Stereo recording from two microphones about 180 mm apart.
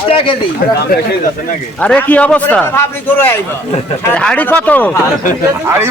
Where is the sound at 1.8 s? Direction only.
10° left (ahead or behind).